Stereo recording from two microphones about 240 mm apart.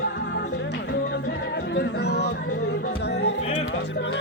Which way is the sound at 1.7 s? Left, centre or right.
Left.